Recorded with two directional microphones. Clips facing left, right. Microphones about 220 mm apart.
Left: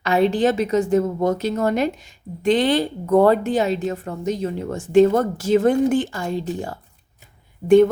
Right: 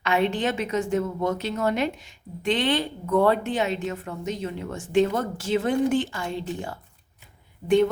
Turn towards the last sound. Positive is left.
turn(degrees=45)  # may be behind; listen again after turning